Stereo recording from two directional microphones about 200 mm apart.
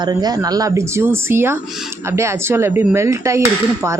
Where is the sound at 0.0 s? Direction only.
20° right (ahead or behind).